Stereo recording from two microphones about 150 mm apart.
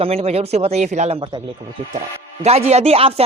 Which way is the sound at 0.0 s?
40° right (ahead or behind).